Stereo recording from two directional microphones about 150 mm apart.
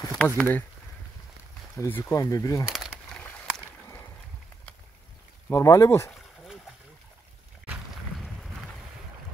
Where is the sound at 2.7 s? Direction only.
5° left (ahead or behind).